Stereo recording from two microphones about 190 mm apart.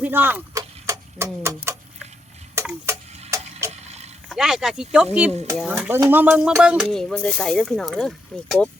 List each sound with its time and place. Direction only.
0.0 s a sound: 10° right (ahead or behind)
3.2 s tick-tock: 15° right (ahead or behind)
4.3 s speech: centre (ahead or behind)